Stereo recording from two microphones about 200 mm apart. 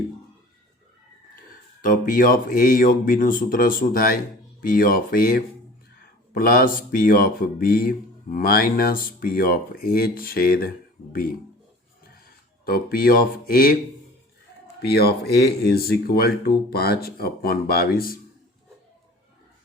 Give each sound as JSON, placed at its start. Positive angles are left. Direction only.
{"t": 1.8, "sound": "speech", "side_deg": 45}
{"t": 12.1, "sound": "speech", "side_deg": 50}
{"t": 14.8, "sound": "speech", "side_deg": 50}